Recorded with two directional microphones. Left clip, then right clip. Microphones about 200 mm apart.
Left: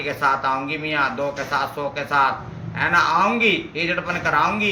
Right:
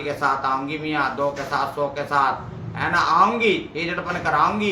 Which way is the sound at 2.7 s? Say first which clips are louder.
Left 1 dB; 20° right (ahead or behind).